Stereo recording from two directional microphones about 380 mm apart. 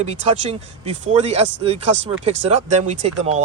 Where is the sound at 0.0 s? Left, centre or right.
Centre.